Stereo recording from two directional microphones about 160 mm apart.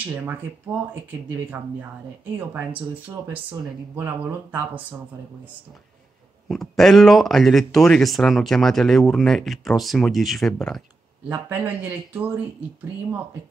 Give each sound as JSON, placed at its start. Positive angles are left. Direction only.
{"t": 0.0, "sound": "speech", "side_deg": -10}
{"t": 6.5, "sound": "speech", "side_deg": 0}
{"t": 11.2, "sound": "speech", "side_deg": -10}